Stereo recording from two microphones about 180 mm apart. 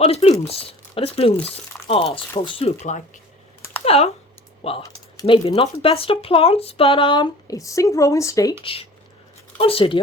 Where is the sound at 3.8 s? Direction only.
35° left (ahead or behind); by 8.5 s 15° left (ahead or behind).